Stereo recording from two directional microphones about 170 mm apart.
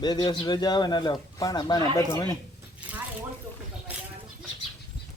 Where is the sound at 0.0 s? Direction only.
25° left (ahead or behind).